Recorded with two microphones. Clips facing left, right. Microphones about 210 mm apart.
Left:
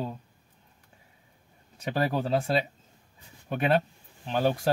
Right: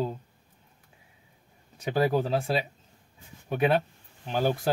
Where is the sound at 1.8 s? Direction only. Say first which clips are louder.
Right 3 dB; centre (ahead or behind).